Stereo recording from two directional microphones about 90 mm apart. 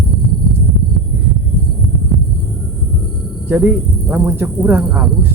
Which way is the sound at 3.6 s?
20° right (ahead or behind).